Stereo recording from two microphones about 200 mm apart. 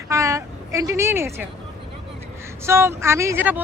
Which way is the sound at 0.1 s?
15° right (ahead or behind).